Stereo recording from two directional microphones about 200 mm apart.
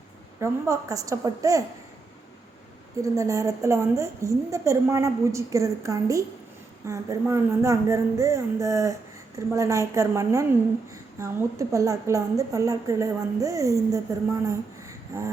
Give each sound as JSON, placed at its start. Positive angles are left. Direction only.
{"t": 0.3, "sound": "a woman's voice", "side_deg": -15}
{"t": 3.0, "sound": "a woman's voice", "side_deg": -15}